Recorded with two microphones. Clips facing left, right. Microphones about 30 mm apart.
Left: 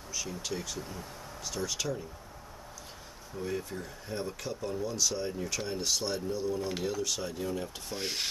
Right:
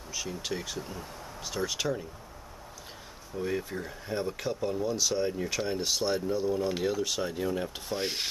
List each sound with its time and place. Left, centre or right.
0.1 s speech: centre
3.3 s speech: right